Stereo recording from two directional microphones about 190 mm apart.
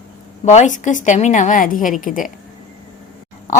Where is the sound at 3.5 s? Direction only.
40° left (ahead or behind).